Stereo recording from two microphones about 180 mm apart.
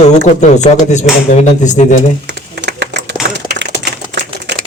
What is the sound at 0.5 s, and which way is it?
Speech, 40° left (ahead or behind).